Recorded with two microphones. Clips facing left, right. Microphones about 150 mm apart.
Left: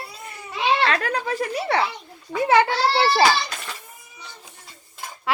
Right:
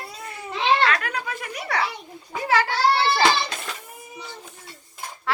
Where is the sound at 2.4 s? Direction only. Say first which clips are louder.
Left 2 dB; 25° left (ahead or behind).